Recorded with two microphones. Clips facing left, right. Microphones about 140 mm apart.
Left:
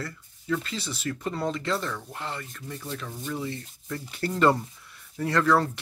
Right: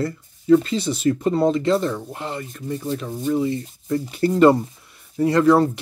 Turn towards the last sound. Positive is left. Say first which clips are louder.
# right 8 dB
turn(degrees=-15)  # may be behind; listen again after turning